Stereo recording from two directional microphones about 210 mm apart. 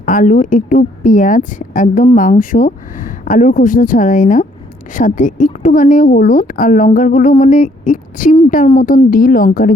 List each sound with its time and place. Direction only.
0.0 s speech: 40° left (ahead or behind)